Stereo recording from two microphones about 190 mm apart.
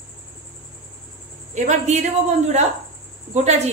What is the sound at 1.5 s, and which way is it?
A woman's voice, 40° right (ahead or behind).